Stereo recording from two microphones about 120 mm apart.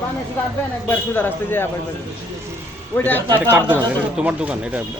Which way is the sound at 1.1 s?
15° left (ahead or behind).